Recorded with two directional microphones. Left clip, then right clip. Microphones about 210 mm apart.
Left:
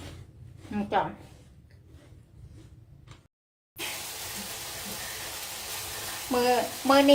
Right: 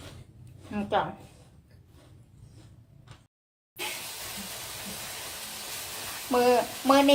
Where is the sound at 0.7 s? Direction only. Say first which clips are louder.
Even; centre (ahead or behind).